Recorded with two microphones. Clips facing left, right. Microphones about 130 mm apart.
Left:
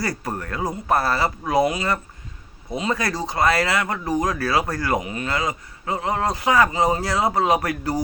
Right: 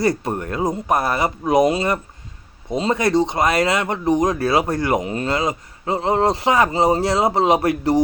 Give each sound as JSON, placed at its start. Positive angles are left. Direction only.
{"t": 0.0, "sound": "speech", "side_deg": -25}